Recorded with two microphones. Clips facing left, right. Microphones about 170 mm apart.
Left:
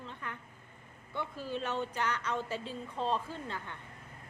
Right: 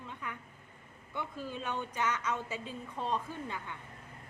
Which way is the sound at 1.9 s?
10° right (ahead or behind).